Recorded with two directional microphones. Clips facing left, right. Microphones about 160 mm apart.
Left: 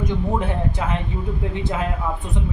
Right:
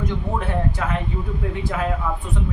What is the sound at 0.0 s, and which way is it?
Speech, 20° left (ahead or behind).